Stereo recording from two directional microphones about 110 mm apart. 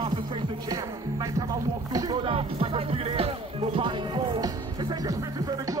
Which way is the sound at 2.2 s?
60° right (ahead or behind).